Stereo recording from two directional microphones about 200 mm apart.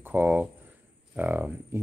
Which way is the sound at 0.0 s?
10° right (ahead or behind).